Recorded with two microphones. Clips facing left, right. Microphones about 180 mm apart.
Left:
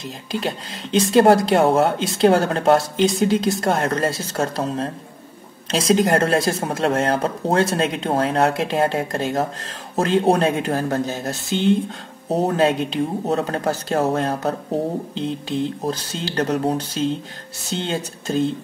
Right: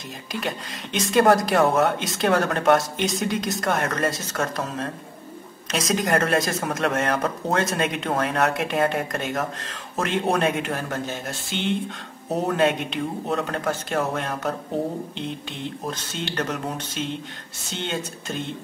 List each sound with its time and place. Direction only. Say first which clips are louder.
0.3 s speech: left 4 dB; 30° left (ahead or behind)
15.8 s speech: left 5 dB; 35° left (ahead or behind)